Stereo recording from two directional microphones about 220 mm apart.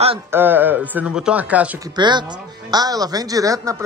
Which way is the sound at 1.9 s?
20° right (ahead or behind).